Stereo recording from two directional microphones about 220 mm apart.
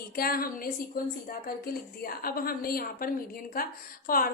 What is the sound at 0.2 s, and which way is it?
A woman's voice, 40° left (ahead or behind).